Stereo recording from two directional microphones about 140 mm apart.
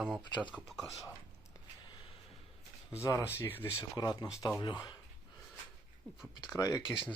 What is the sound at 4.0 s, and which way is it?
Speech, 30° left (ahead or behind).